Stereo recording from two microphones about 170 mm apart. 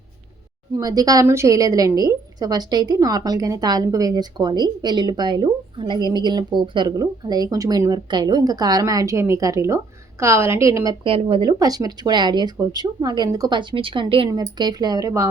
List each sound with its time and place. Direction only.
0.8 s a woman's voice: 20° right (ahead or behind)
11.0 s a woman's voice: 30° right (ahead or behind)